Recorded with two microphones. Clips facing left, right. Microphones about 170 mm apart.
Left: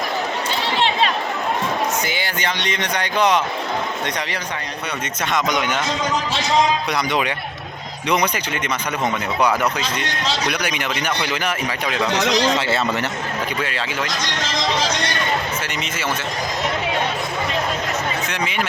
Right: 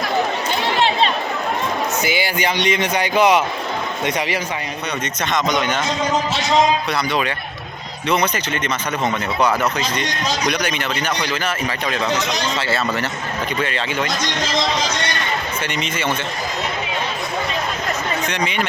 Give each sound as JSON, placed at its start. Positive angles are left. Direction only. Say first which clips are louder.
{"t": 2.0, "sound": "speech", "louder": "right 4 dB", "side_deg": -10}
{"t": 5.3, "sound": "speech", "louder": "right 1 dB", "side_deg": 10}
{"t": 6.9, "sound": "speech", "louder": "even", "side_deg": 15}
{"t": 13.6, "sound": "speech", "louder": "right 3 dB", "side_deg": 5}
{"t": 18.3, "sound": "speech", "louder": "right 2 dB", "side_deg": 5}